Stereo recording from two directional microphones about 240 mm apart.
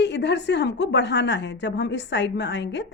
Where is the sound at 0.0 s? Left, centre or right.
Left.